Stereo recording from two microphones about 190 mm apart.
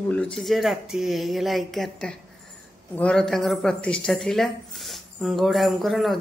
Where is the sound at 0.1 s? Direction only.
5° left (ahead or behind).